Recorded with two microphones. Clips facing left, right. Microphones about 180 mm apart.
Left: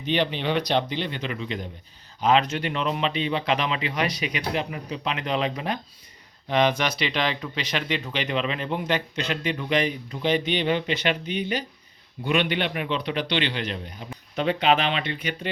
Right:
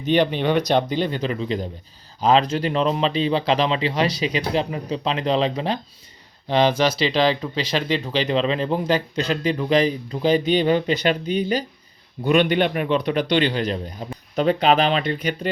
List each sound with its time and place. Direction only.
0.0 s speech: 45° right (ahead or behind)